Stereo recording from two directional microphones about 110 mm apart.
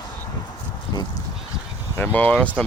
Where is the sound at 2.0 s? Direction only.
15° left (ahead or behind).